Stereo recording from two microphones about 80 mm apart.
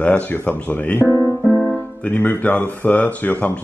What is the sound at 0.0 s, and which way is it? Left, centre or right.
Speech, left.